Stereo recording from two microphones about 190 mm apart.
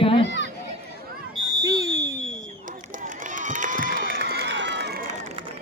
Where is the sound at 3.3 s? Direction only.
40° right (ahead or behind).